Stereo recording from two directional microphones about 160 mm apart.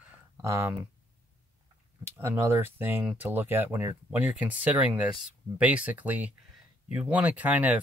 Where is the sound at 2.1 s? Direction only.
15° right (ahead or behind).